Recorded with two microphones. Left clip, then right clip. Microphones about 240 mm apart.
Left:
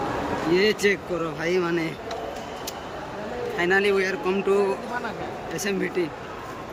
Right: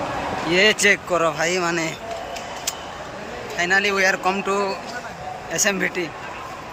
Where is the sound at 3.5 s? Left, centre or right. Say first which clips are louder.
Right 3 dB; centre.